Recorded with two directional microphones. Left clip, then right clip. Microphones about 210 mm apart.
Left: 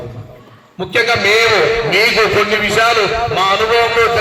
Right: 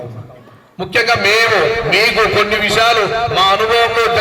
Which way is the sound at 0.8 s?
15° right (ahead or behind).